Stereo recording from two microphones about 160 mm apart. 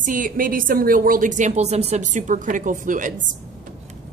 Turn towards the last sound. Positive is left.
turn(degrees=-55)  # may be behind; listen again after turning